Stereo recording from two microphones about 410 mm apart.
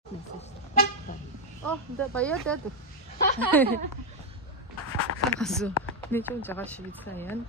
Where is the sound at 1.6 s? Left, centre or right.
Centre.